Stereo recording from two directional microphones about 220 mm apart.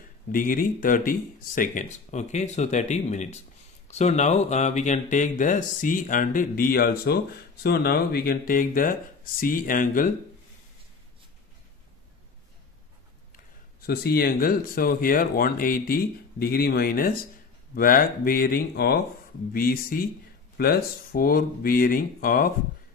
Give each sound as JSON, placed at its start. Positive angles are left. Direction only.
{"t": 0.3, "sound": "speech", "side_deg": 40}
{"t": 13.8, "sound": "speech", "side_deg": 45}